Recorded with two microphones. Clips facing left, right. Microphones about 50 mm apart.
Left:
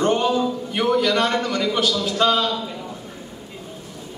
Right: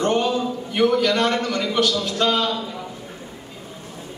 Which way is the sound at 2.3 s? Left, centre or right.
Centre.